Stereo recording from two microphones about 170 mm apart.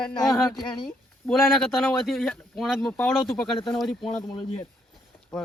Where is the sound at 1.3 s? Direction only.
Centre (ahead or behind).